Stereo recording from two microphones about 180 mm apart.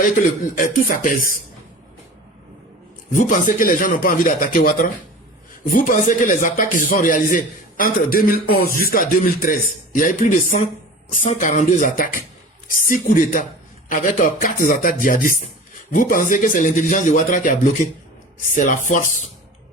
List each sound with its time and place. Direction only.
0.5 s a man's voice: 50° left (ahead or behind)
3.1 s a man's voice: 50° left (ahead or behind)